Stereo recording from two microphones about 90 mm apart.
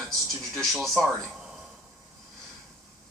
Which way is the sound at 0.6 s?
5° left (ahead or behind).